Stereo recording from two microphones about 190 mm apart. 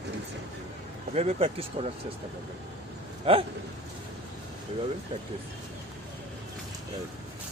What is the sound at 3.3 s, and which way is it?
Speech, 30° right (ahead or behind).